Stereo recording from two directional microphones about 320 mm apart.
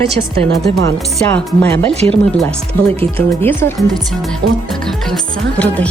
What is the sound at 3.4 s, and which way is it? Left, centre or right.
Speech, centre.